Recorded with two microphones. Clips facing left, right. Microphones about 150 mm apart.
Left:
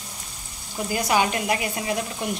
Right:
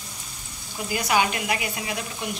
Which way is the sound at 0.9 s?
35° left (ahead or behind).